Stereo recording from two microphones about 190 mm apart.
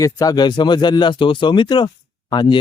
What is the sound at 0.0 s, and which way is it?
Speech, 20° left (ahead or behind).